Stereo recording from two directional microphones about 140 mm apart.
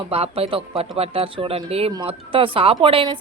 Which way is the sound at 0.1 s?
45° right (ahead or behind).